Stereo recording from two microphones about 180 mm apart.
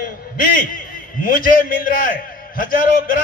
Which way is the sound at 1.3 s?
50° left (ahead or behind).